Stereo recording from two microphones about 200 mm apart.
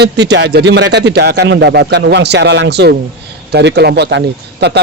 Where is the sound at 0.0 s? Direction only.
60° right (ahead or behind).